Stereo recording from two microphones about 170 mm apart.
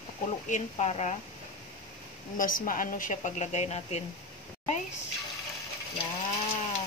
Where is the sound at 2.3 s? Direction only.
55° left (ahead or behind).